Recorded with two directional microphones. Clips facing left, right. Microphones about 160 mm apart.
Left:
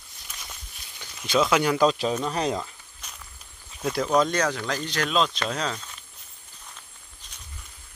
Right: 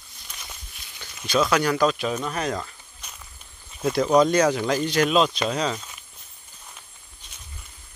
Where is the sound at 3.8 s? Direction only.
5° right (ahead or behind).